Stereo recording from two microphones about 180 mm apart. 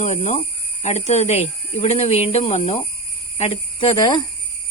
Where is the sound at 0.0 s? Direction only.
40° left (ahead or behind); by 4.2 s 20° left (ahead or behind).